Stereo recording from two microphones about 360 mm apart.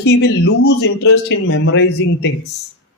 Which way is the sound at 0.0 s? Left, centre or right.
Left.